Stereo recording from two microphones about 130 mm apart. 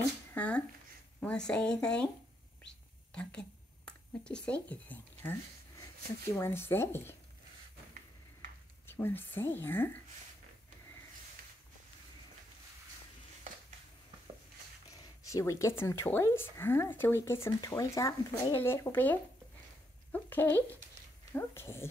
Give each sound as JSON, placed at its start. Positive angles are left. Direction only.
{"t": 0.3, "sound": "a sound", "side_deg": 10}
{"t": 1.2, "sound": "speech", "side_deg": 10}
{"t": 2.6, "sound": "whispering", "side_deg": 10}
{"t": 6.3, "sound": "speech", "side_deg": 20}
{"t": 8.8, "sound": "speech", "side_deg": 15}
{"t": 14.9, "sound": "speech", "side_deg": 25}